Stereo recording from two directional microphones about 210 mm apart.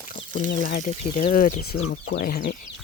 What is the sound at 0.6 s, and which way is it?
Speech, 40° left (ahead or behind).